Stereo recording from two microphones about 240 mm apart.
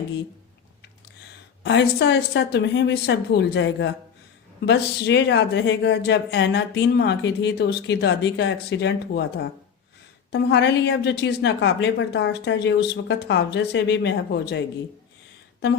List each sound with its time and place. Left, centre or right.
1.6 s a woman's voice: left